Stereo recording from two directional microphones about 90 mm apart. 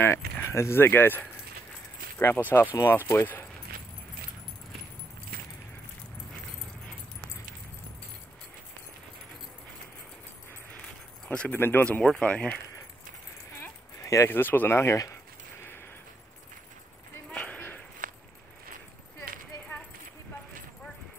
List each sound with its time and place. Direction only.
0.0 s speech: 25° left (ahead or behind)
11.2 s speech: 15° left (ahead or behind)
13.9 s speech: 35° left (ahead or behind)
17.3 s a sound: 15° left (ahead or behind)